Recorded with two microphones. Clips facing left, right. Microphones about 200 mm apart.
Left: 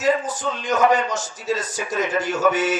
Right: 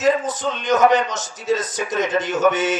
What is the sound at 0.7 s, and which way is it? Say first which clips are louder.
Speech: right 3 dB; 20° right (ahead or behind).